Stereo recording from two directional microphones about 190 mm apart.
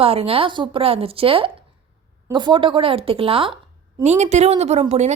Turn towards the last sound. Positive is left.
turn(degrees=-35)  # may be behind; listen again after turning